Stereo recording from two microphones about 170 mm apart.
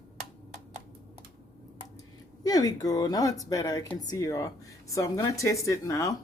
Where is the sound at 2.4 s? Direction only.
20° left (ahead or behind).